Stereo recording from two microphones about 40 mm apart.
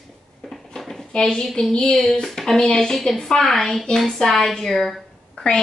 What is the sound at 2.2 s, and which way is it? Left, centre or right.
A woman's voice, centre.